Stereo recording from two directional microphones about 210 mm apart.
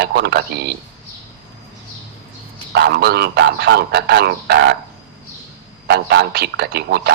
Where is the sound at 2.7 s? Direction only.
50° right (ahead or behind).